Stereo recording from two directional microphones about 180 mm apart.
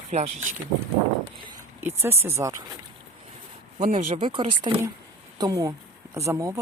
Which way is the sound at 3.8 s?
40° right (ahead or behind).